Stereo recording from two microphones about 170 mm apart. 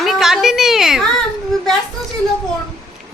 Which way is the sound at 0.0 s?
Centre (ahead or behind).